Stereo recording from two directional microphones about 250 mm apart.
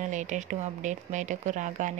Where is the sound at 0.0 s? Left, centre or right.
Right.